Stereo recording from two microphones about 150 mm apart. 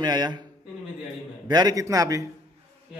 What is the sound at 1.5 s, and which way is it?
Speech, 25° right (ahead or behind).